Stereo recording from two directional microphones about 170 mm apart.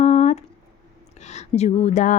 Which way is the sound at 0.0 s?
40° left (ahead or behind).